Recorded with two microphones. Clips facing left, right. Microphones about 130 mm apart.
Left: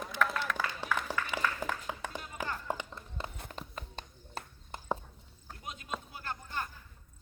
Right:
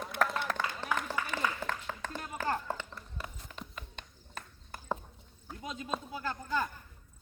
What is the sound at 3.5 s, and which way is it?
Horse, 35° left (ahead or behind).